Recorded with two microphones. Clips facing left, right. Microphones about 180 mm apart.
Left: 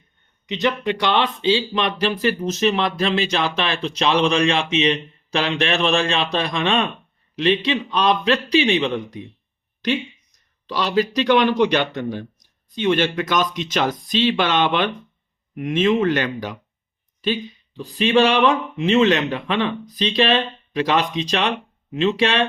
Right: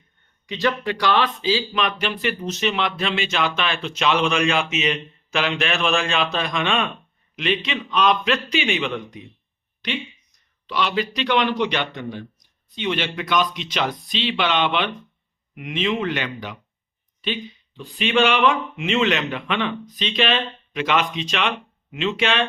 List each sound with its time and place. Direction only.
0.4 s speech: 20° left (ahead or behind)